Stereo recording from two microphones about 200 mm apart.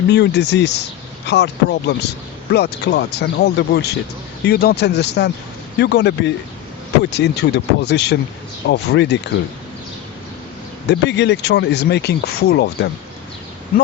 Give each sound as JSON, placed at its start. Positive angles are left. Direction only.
{"t": 0.1, "sound": "speech", "side_deg": 55}
{"t": 10.8, "sound": "speech", "side_deg": 60}